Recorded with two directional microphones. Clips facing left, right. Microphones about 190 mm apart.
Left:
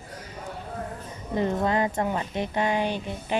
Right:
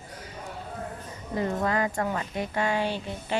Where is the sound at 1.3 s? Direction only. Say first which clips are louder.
Left 2 dB; 25° left (ahead or behind).